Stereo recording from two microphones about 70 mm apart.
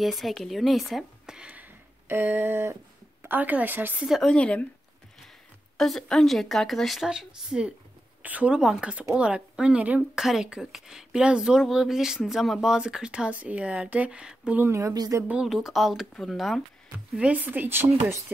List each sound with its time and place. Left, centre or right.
0.0 s speech: centre
1.5 s speech: right
4.2 s speech: centre
5.8 s speech: centre
7.1 s speech: centre
8.2 s speech: right
10.1 s speech: centre
14.6 s speech: right
15.0 s speech: right
15.4 s speech: centre
17.2 s speech: right